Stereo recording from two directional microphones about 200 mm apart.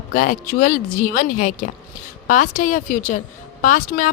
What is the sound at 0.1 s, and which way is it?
Speech, 45° left (ahead or behind).